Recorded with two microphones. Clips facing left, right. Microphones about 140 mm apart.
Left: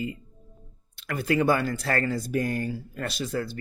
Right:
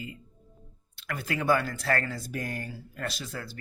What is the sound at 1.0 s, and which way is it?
Speech, 25° left (ahead or behind).